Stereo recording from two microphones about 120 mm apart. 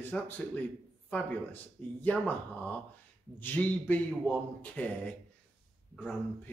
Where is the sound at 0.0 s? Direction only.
15° left (ahead or behind).